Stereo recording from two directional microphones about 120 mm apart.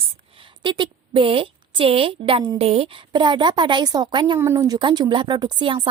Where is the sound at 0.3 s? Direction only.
45° right (ahead or behind).